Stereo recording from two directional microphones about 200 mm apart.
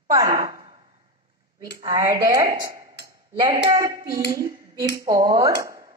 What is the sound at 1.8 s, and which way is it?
Speech, 15° right (ahead or behind).